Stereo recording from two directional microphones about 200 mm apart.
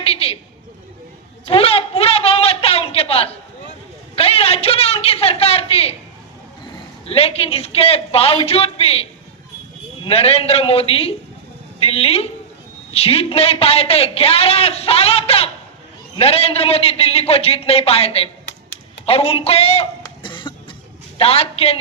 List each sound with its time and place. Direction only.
0.0 s a man's voice: 30° left (ahead or behind)
1.5 s a man's voice: 30° left (ahead or behind)
10.0 s a man's voice: 30° left (ahead or behind)
20.0 s cough: 25° left (ahead or behind)
21.2 s a woman's voice: 30° left (ahead or behind)